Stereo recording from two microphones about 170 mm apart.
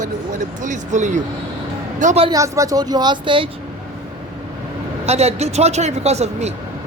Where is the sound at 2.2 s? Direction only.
20° right (ahead or behind).